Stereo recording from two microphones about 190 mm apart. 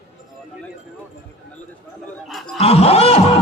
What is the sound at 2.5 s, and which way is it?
Snicker, 30° left (ahead or behind).